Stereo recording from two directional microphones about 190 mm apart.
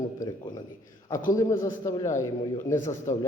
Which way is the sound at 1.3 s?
15° left (ahead or behind).